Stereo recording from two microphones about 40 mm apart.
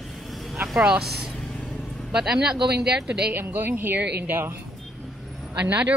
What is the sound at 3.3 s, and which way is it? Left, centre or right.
A woman's voice, right.